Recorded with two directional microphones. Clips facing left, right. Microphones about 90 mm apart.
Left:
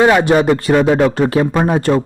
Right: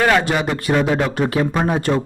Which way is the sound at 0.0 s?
20° left (ahead or behind).